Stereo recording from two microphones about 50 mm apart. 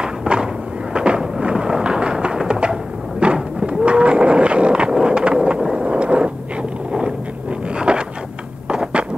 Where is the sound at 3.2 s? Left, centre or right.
Centre.